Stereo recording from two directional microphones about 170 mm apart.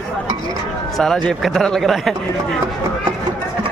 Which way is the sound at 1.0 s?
5° left (ahead or behind).